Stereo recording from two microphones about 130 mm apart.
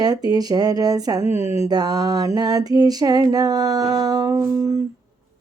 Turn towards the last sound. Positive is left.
turn(degrees=-30)  # may be behind; listen again after turning